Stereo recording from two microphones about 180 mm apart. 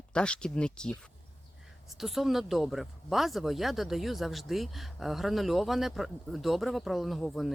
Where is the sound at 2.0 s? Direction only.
Centre (ahead or behind).